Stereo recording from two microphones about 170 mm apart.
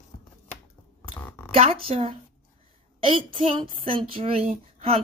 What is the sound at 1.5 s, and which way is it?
A woman's voice, 35° right (ahead or behind).